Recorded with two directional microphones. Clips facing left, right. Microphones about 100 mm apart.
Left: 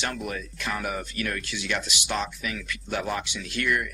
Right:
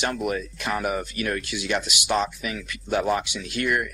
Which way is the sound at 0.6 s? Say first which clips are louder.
Right 3 dB; 25° right (ahead or behind).